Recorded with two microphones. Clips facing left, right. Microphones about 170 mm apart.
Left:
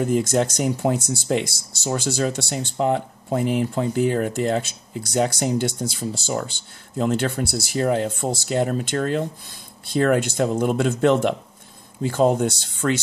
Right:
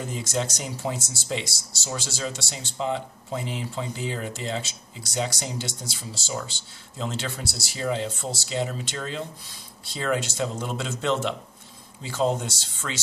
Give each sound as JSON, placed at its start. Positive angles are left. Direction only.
{"t": 0.0, "sound": "speech", "side_deg": 55}